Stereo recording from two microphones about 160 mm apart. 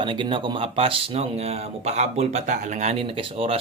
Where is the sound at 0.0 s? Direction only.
30° right (ahead or behind).